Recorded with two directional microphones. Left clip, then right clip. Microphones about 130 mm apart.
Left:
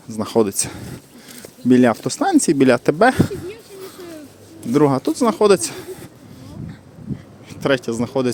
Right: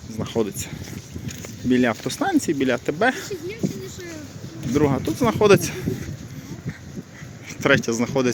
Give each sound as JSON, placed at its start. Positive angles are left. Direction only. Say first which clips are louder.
{"t": 0.2, "sound": "speech", "louder": "left 7 dB", "side_deg": 60}
{"t": 1.7, "sound": "speech", "louder": "left 6 dB", "side_deg": 45}
{"t": 2.0, "sound": "speech", "louder": "left 5 dB", "side_deg": 30}
{"t": 2.5, "sound": "speech", "louder": "left 7 dB", "side_deg": 55}
{"t": 4.7, "sound": "speech", "louder": "left 5 dB", "side_deg": 45}
{"t": 7.6, "sound": "speech", "louder": "even", "side_deg": 15}